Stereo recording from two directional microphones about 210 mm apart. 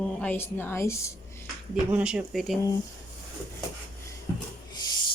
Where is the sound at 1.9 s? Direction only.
5° right (ahead or behind).